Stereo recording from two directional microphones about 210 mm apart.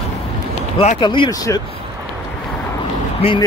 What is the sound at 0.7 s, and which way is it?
Speech, 25° left (ahead or behind).